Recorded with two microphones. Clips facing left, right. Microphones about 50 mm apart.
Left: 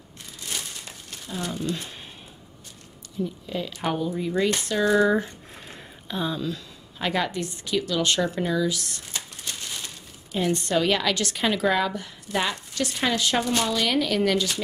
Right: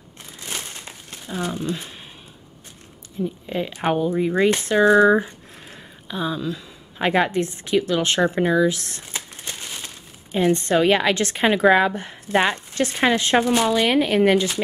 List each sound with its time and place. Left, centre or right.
0.5 s crumpling: right
3.4 s speech: right
5.7 s a sound: centre
7.0 s a woman's voice: right